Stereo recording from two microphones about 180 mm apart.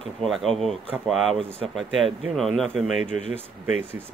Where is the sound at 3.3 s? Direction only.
10° right (ahead or behind).